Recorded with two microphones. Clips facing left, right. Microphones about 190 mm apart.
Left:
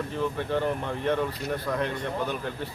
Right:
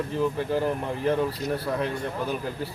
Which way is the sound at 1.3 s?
30° right (ahead or behind).